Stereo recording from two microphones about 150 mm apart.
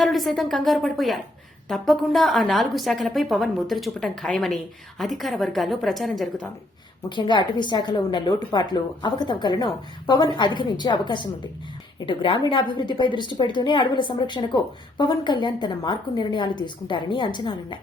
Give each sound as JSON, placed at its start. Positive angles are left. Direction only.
{"t": 0.0, "sound": "a woman's voice", "side_deg": 0}
{"t": 7.2, "sound": "a woman's voice", "side_deg": 30}